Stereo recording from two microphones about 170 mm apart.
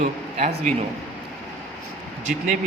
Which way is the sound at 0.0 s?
45° right (ahead or behind).